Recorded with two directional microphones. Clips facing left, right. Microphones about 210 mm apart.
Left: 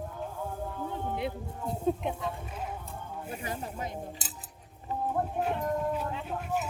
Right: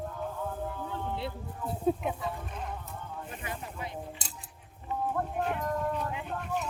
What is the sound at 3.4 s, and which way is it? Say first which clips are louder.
Speech: left 4 dB; 40° left (ahead or behind).